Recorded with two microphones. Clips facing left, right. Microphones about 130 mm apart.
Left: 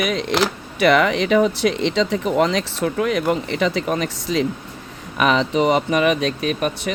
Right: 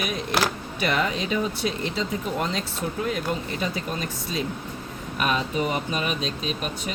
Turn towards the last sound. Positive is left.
turn(degrees=65)  # may be behind; listen again after turning